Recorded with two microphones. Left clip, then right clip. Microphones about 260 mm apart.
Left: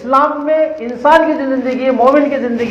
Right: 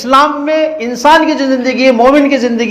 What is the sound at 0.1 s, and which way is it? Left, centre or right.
A man's voice, right.